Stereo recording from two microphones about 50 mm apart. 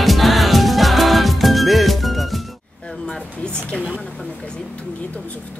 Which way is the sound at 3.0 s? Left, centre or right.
Centre.